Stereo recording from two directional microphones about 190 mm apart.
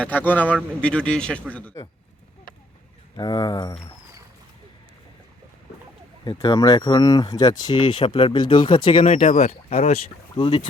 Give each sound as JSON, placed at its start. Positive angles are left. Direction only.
{"t": 0.0, "sound": "speech", "side_deg": 10}
{"t": 3.2, "sound": "speech", "side_deg": 20}
{"t": 6.2, "sound": "speech", "side_deg": 20}
{"t": 9.1, "sound": "speech", "side_deg": 40}